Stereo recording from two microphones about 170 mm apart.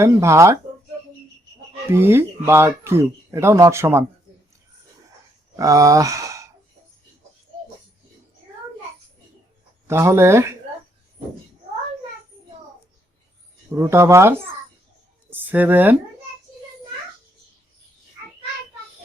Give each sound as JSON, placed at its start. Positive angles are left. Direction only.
{"t": 0.0, "sound": "speech", "side_deg": -15}
{"t": 1.9, "sound": "speech", "side_deg": -15}
{"t": 5.5, "sound": "speech", "side_deg": -20}
{"t": 9.8, "sound": "speech", "side_deg": -15}
{"t": 13.7, "sound": "speech", "side_deg": -15}